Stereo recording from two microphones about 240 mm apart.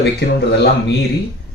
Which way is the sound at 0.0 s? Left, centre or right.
Left.